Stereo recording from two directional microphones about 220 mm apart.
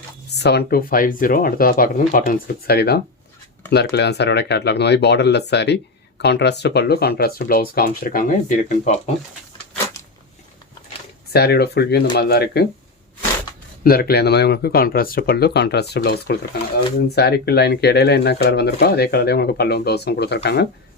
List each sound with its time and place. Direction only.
0.3 s speech: 50° left (ahead or behind); by 9.0 s 35° left (ahead or behind)
11.3 s speech: 50° left (ahead or behind)
13.8 s speech: 45° left (ahead or behind)